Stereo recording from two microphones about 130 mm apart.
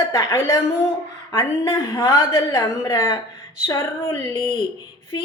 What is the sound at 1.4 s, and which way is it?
A woman's voice, 35° left (ahead or behind).